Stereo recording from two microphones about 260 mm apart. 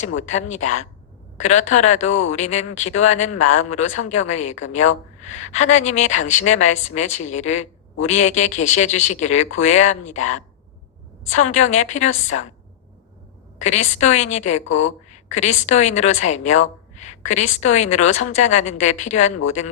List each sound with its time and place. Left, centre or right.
0.0 s speech: left
1.4 s speech: left
11.3 s speech: left
13.7 s speech: left